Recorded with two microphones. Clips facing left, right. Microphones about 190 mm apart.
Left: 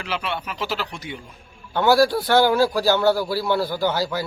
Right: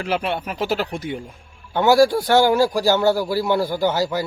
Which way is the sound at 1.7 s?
15° right (ahead or behind).